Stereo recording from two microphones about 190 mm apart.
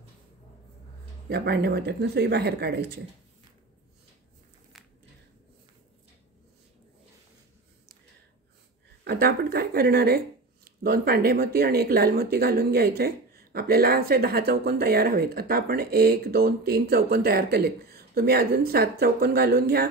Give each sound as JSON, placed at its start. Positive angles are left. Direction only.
{"t": 1.3, "sound": "speech", "side_deg": -60}
{"t": 9.0, "sound": "speech", "side_deg": -55}